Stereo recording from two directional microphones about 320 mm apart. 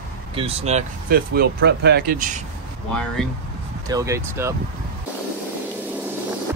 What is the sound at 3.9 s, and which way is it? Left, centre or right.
Speech, centre.